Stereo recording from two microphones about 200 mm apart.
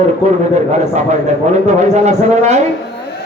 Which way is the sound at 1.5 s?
35° right (ahead or behind).